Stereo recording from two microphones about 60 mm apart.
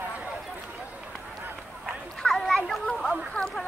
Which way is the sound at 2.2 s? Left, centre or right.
Centre.